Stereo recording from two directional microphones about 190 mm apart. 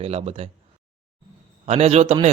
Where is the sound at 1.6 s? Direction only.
35° right (ahead or behind).